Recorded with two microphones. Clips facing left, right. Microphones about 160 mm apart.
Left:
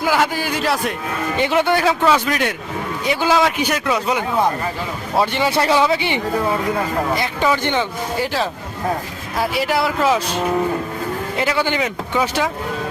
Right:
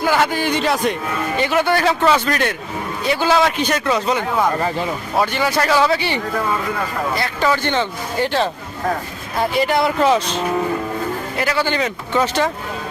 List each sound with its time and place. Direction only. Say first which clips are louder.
0.0 s speech: right 1 dB; 5° left (ahead or behind)
1.4 s speech: left 1 dB; 20° left (ahead or behind)
5.2 s speech: left 1 dB; 25° left (ahead or behind)
7.2 s speech: even; 15° left (ahead or behind)
11.3 s speech: even; 20° left (ahead or behind)